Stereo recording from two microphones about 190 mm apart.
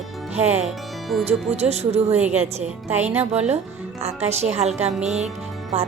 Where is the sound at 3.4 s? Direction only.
35° right (ahead or behind).